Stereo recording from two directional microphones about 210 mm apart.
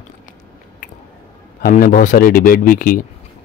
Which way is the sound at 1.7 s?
40° left (ahead or behind).